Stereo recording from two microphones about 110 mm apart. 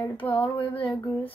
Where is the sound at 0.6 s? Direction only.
50° left (ahead or behind).